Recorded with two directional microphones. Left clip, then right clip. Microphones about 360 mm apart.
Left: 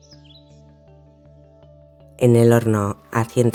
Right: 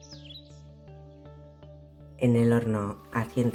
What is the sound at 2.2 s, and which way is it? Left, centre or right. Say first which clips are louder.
Speech: left 10 dB; left.